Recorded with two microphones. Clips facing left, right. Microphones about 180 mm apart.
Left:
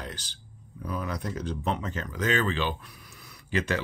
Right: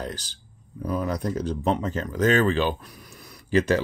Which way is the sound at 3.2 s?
40° right (ahead or behind).